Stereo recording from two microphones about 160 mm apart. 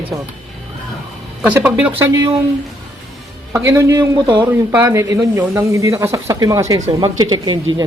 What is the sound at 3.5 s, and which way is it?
Speech, 20° right (ahead or behind).